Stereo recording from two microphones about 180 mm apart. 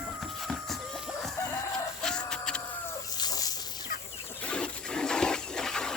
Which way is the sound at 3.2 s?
20° left (ahead or behind).